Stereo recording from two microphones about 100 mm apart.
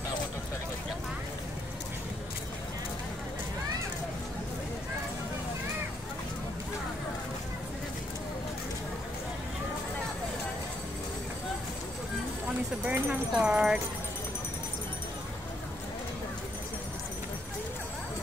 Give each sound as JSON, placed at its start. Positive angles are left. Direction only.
{"t": 12.8, "sound": "speech", "side_deg": -15}